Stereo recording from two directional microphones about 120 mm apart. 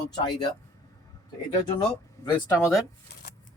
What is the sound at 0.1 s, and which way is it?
Speech, 35° left (ahead or behind).